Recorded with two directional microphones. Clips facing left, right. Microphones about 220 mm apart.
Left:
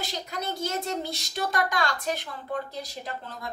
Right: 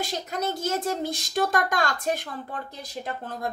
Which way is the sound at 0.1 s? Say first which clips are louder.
Right 4 dB; 50° right (ahead or behind).